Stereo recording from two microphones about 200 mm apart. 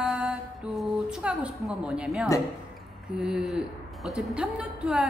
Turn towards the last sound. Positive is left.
turn(degrees=-5)  # may be behind; listen again after turning